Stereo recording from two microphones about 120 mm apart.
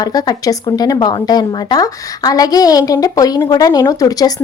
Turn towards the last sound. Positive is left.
turn(degrees=30)  # may be behind; listen again after turning